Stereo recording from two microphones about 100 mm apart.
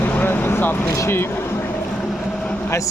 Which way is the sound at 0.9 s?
30° left (ahead or behind).